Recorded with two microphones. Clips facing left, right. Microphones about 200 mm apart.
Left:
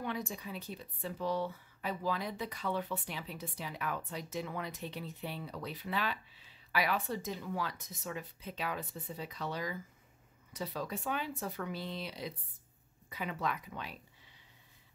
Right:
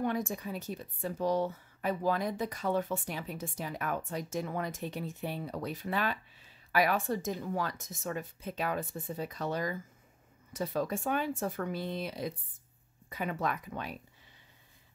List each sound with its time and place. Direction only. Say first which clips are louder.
0.0 s speech: right 6 dB; 50° right (ahead or behind)